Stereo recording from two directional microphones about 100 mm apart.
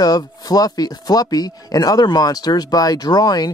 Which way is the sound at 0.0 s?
40° left (ahead or behind).